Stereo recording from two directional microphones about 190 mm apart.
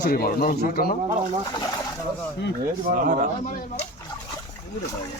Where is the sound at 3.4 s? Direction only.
45° left (ahead or behind).